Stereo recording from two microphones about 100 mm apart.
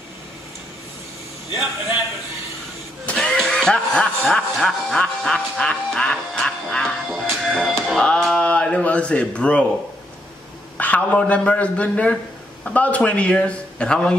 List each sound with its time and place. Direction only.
1.5 s a man's voice: 20° right (ahead or behind)
3.2 s music: 5° left (ahead or behind)
7.5 s speech: centre (ahead or behind)
10.8 s speech: 15° left (ahead or behind)